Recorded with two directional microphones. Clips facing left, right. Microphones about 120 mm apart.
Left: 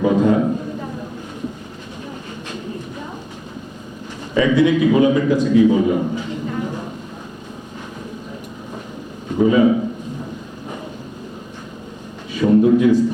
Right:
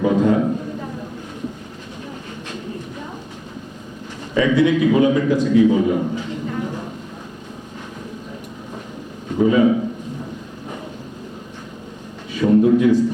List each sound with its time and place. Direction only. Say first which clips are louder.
0.0 s a man's voice: left 1 dB; 10° left (ahead or behind)
4.4 s a man's voice: left 1 dB; 10° left (ahead or behind)
9.4 s a man's voice: left 1 dB; 10° left (ahead or behind)
12.3 s a sound: left 1 dB; 10° left (ahead or behind)